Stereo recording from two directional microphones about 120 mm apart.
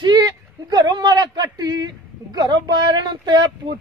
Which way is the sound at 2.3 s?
35° right (ahead or behind).